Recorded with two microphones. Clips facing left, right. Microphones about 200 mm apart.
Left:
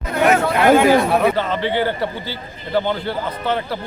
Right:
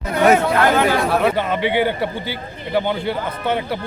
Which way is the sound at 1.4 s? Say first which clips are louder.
Right 1 dB; 15° right (ahead or behind).